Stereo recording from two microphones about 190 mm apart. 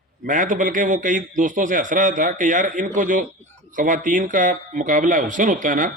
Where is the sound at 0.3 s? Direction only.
40° right (ahead or behind).